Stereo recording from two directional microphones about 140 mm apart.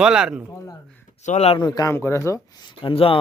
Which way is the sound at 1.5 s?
30° left (ahead or behind).